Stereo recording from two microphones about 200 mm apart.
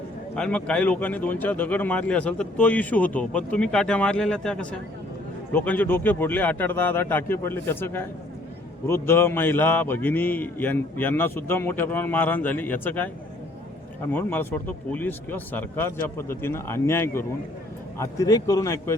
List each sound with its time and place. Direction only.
0.3 s speech: 5° left (ahead or behind)
14.1 s speech: 10° left (ahead or behind)